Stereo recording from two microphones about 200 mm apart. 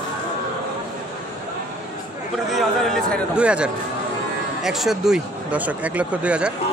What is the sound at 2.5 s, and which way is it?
Speech, centre (ahead or behind).